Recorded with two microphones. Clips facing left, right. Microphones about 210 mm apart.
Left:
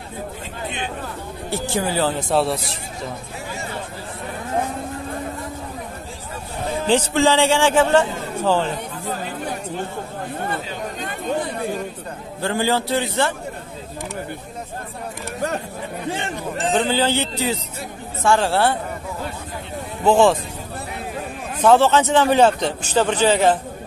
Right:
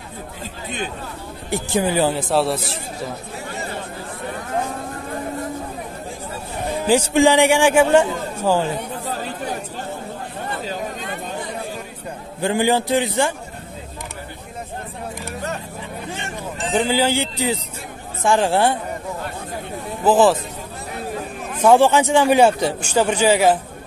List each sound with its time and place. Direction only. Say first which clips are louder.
1.5 s a man's voice: right 3 dB; 15° right (ahead or behind)
2.1 s a man's voice: right 1 dB; centre (ahead or behind)
6.8 s a man's voice: right 3 dB; 10° right (ahead or behind)
12.4 s a man's voice: right 3 dB; 15° right (ahead or behind)
16.7 s a man's voice: right 2 dB; 10° right (ahead or behind)
20.1 s a man's voice: even; 5° right (ahead or behind)
21.5 s a man's voice: right 1 dB; 10° right (ahead or behind)